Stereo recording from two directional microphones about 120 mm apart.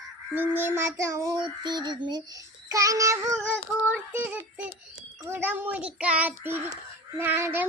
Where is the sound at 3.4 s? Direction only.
15° right (ahead or behind).